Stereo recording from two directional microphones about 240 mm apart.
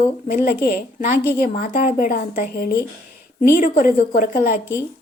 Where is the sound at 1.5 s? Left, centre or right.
Left.